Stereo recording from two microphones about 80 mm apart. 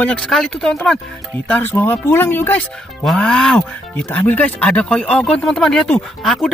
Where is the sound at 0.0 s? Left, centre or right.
Centre.